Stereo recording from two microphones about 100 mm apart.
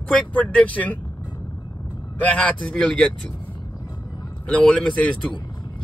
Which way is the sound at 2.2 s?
15° left (ahead or behind).